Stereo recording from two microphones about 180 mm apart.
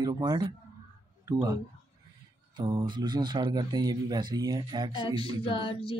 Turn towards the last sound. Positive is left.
turn(degrees=30)  # may be behind; listen again after turning